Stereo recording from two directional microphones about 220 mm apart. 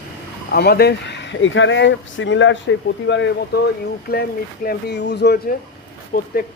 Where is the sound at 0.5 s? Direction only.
45° left (ahead or behind).